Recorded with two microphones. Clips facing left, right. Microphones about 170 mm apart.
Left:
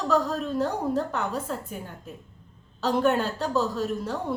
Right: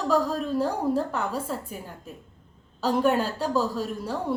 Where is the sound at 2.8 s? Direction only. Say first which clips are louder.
Even; 10° right (ahead or behind).